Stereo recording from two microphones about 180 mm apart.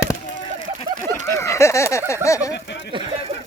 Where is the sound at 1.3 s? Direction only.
15° left (ahead or behind).